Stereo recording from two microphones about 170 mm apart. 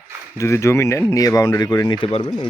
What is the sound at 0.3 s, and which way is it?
Speech, 15° left (ahead or behind).